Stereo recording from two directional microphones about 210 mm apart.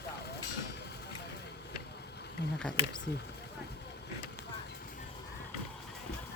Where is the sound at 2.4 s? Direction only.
55° left (ahead or behind).